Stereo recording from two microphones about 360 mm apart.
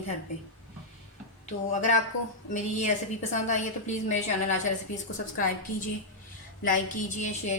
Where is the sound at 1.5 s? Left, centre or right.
Centre.